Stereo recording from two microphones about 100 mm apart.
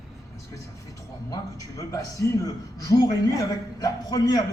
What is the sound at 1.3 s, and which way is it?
A man's voice, 30° left (ahead or behind).